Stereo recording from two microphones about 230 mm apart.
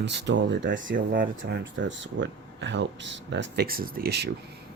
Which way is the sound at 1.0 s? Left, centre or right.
Right.